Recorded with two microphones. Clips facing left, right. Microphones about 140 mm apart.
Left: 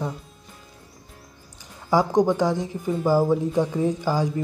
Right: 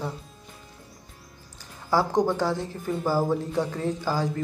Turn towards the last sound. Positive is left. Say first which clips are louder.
# left 3 dB
turn(degrees=15)  # may be behind; listen again after turning